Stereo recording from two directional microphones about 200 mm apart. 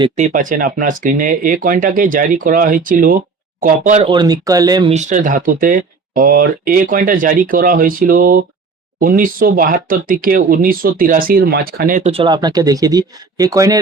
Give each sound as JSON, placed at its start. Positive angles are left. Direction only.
{"t": 0.2, "sound": "speech", "side_deg": -40}
{"t": 4.1, "sound": "speech", "side_deg": -20}
{"t": 4.9, "sound": "speech", "side_deg": -40}
{"t": 12.1, "sound": "speech", "side_deg": -25}